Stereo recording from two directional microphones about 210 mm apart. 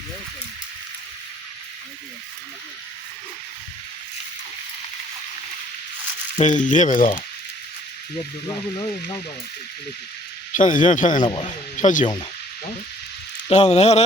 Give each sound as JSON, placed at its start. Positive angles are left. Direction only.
{"t": 6.4, "sound": "speech", "side_deg": 35}
{"t": 8.4, "sound": "speech", "side_deg": 20}
{"t": 10.5, "sound": "speech", "side_deg": 40}
{"t": 11.3, "sound": "speech", "side_deg": 25}
{"t": 13.5, "sound": "speech", "side_deg": 30}